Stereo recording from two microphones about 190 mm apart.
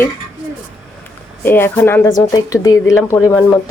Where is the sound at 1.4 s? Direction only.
10° left (ahead or behind).